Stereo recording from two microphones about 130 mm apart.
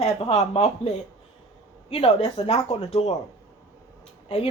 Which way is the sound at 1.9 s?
45° left (ahead or behind).